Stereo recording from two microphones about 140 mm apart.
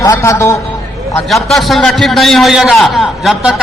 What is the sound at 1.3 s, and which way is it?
A man's voice, centre (ahead or behind).